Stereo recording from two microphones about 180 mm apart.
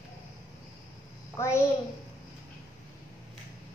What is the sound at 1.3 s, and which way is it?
Speech, 15° left (ahead or behind).